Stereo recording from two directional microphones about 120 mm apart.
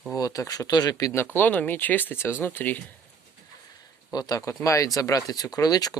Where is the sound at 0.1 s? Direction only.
30° left (ahead or behind).